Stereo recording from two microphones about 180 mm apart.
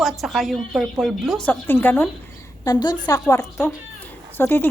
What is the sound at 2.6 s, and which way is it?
A woman's voice, 20° left (ahead or behind).